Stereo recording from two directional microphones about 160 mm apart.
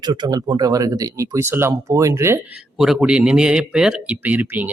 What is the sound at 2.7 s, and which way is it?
Speech, 5° right (ahead or behind).